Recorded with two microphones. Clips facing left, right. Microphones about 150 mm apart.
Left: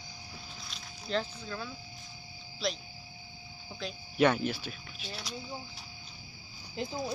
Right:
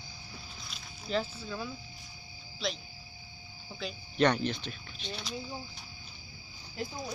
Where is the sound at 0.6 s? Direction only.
5° right (ahead or behind).